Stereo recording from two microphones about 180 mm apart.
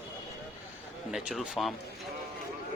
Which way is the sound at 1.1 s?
5° right (ahead or behind).